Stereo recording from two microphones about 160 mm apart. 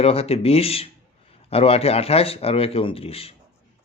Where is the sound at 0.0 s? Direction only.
40° left (ahead or behind).